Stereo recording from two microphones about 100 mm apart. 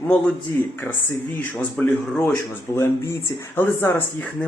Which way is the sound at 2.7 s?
25° left (ahead or behind).